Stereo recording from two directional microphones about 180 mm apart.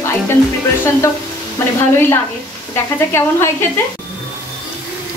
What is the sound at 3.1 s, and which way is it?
Speech, 15° left (ahead or behind).